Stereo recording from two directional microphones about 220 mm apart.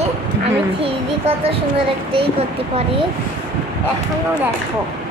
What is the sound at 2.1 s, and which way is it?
Speech, 25° right (ahead or behind).